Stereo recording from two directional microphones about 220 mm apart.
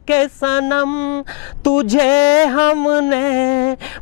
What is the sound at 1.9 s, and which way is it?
Music, 15° left (ahead or behind).